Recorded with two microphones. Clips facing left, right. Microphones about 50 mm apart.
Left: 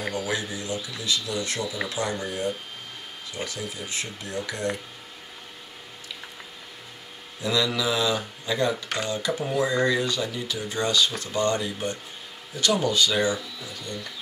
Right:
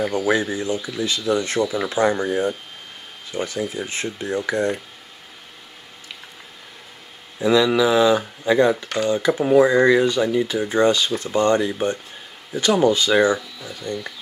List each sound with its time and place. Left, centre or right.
0.1 s speech: right
7.3 s speech: right